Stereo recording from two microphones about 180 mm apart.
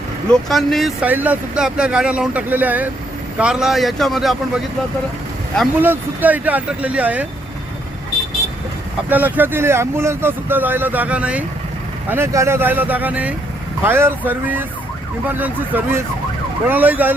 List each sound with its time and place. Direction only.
0.3 s speech: centre (ahead or behind)
5.8 s speech: 10° right (ahead or behind)
9.0 s speech: 10° right (ahead or behind)